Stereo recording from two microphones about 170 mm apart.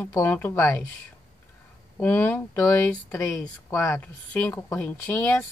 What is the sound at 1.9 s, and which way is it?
Speech, 10° left (ahead or behind).